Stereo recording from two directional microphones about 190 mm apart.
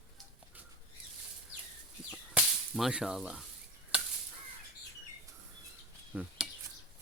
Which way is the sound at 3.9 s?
5° right (ahead or behind).